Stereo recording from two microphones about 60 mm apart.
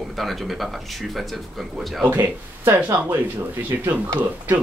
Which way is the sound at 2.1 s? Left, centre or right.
Right.